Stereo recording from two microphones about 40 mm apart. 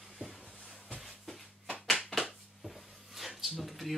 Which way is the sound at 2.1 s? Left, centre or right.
Centre.